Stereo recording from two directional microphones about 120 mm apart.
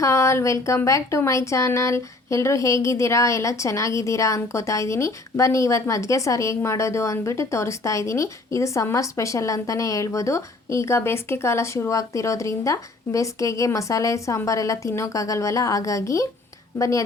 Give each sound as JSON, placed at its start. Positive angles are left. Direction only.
{"t": 0.0, "sound": "a woman's voice", "side_deg": 25}